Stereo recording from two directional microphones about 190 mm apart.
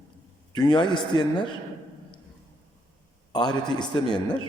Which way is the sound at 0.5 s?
25° left (ahead or behind).